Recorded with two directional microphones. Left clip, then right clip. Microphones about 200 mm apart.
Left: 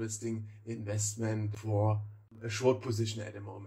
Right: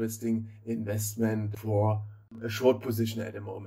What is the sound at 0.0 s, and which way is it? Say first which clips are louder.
Speech: right 6 dB; 25° right (ahead or behind).